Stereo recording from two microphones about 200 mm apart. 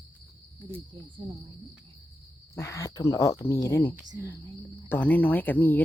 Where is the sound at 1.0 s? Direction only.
20° right (ahead or behind).